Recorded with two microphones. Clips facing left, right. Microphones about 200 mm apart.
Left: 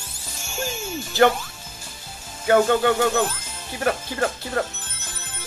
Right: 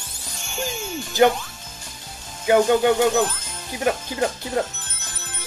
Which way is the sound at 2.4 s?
15° right (ahead or behind).